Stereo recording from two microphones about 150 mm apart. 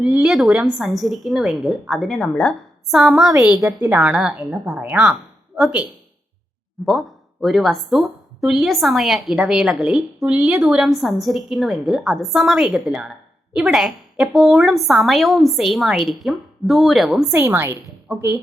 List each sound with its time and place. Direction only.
0.0 s a woman's voice: centre (ahead or behind)
7.4 s a woman's voice: centre (ahead or behind)
17.3 s a woman's voice: 20° right (ahead or behind)